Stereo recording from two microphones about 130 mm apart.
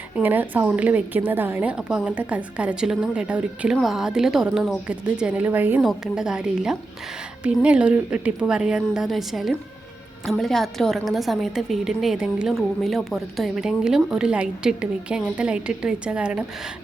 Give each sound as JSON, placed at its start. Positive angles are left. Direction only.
{"t": 0.2, "sound": "a woman's voice", "side_deg": -15}
{"t": 5.8, "sound": "a woman's voice", "side_deg": -5}